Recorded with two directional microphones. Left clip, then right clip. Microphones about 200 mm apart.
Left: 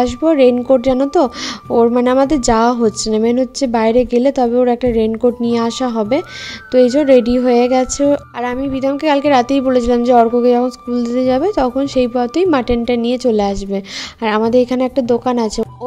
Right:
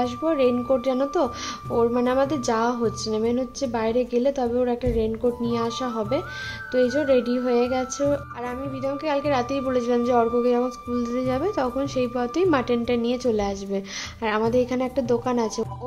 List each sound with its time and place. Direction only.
0.0 s a woman's voice: 35° left (ahead or behind)